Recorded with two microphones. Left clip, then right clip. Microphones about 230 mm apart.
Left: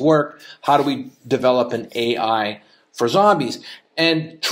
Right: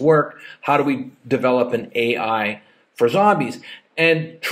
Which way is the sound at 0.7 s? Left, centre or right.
Centre.